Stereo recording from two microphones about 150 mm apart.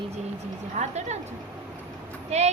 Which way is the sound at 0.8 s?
50° right (ahead or behind).